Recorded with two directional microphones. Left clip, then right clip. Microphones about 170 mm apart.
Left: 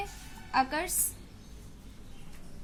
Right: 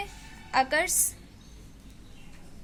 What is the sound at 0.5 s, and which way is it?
Speech, 35° right (ahead or behind).